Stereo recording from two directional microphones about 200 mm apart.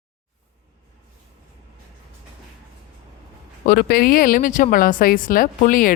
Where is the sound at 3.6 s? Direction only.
45° left (ahead or behind).